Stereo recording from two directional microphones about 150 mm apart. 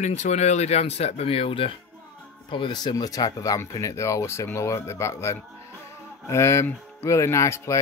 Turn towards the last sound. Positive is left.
turn(degrees=20)  # may be behind; listen again after turning